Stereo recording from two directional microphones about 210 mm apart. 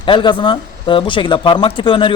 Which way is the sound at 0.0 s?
20° left (ahead or behind).